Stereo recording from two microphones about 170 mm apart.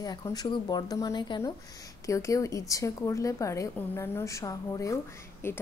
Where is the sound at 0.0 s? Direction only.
20° left (ahead or behind).